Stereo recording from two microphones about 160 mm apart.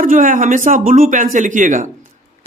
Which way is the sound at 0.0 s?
55° right (ahead or behind).